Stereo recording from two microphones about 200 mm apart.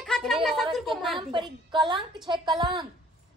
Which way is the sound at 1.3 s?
25° right (ahead or behind).